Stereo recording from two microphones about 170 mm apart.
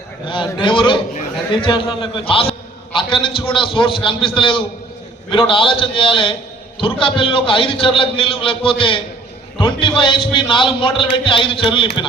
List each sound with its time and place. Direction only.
0.3 s a man's voice: 30° left (ahead or behind)